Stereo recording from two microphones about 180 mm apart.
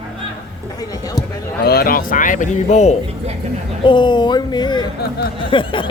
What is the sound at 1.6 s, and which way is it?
Speech, 55° left (ahead or behind).